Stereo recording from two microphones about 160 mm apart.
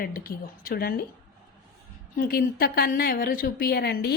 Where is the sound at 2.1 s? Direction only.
65° left (ahead or behind); by 4.2 s 90° left.